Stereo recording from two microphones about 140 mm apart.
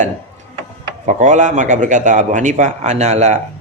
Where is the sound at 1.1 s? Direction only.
60° right (ahead or behind).